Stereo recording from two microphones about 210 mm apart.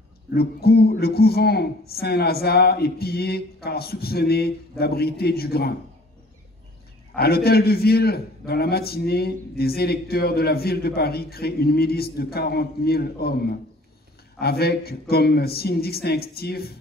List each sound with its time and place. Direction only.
0.3 s a man's voice: 50° left (ahead or behind)
7.2 s a man's voice: 50° left (ahead or behind)